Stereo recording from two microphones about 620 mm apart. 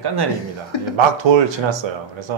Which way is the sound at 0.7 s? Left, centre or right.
Left.